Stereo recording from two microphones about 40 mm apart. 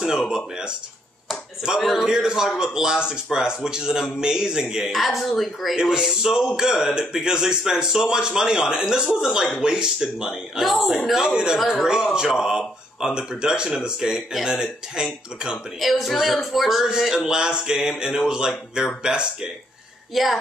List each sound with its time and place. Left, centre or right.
1.8 s music: centre
2.0 s speech: centre
4.9 s music: centre
5.8 s speech: centre
10.6 s music: centre
11.1 s speech: centre
15.8 s music: centre
17.1 s speech: centre
20.1 s music: centre